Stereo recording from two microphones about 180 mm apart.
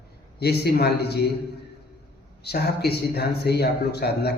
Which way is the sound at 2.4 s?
60° left (ahead or behind).